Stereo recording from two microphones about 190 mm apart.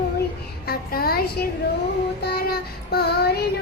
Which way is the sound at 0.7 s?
50° left (ahead or behind).